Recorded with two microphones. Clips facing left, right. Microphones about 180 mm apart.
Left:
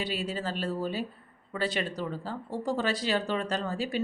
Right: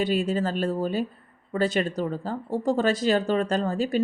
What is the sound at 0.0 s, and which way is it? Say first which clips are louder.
Speech: right 8 dB; 50° right (ahead or behind).